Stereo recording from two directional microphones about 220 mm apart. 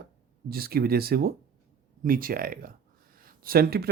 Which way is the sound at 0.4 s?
45° right (ahead or behind).